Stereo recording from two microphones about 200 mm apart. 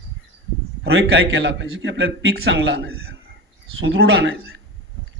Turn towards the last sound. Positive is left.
turn(degrees=-60)  # may be behind; listen again after turning